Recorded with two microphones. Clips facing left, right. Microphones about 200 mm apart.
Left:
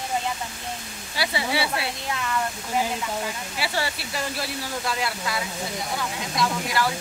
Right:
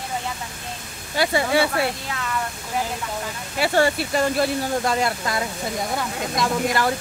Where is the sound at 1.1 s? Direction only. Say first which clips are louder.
Right 7 dB; 45° right (ahead or behind).